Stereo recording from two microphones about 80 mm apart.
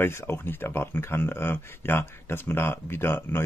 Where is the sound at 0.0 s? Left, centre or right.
Left.